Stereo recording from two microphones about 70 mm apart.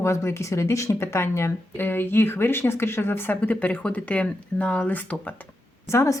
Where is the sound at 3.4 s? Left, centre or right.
Left.